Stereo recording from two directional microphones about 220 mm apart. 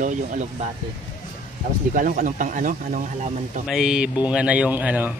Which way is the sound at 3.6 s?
5° right (ahead or behind).